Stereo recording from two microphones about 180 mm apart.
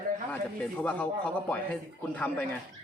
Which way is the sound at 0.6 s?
10° left (ahead or behind).